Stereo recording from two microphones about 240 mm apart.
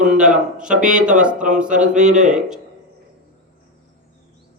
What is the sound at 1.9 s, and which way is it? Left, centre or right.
Speech, right.